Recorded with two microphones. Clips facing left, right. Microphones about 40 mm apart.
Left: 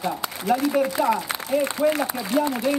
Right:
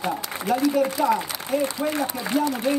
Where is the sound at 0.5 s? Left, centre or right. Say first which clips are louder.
Right 1 dB; left.